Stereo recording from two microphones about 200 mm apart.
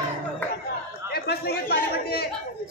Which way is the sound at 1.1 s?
55° left (ahead or behind).